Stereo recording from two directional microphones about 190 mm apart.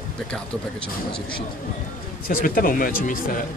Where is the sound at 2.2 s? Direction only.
45° left (ahead or behind).